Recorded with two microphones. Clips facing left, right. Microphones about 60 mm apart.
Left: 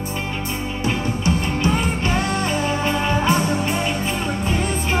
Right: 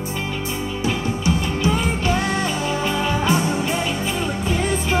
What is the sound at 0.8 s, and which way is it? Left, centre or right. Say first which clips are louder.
Music: even; left.